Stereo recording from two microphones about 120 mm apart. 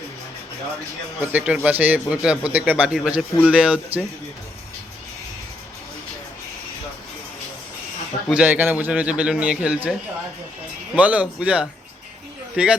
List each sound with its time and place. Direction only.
1.2 s a man's voice: 15° right (ahead or behind)
8.3 s a man's voice: 10° right (ahead or behind)
10.9 s a man's voice: 10° right (ahead or behind)